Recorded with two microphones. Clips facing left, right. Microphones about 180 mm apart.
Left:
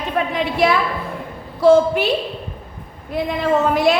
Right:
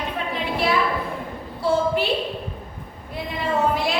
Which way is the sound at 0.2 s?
90° left.